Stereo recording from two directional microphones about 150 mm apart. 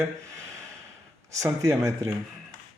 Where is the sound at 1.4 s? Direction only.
20° right (ahead or behind).